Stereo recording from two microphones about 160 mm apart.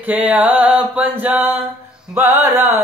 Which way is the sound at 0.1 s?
10° right (ahead or behind).